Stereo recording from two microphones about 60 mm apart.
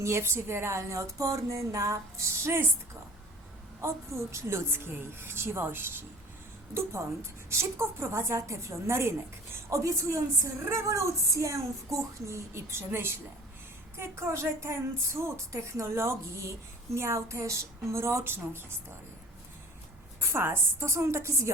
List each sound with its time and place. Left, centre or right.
0.0 s a woman's voice: right
2.4 s a woman's voice: right
3.8 s a woman's voice: right
20.2 s a woman's voice: right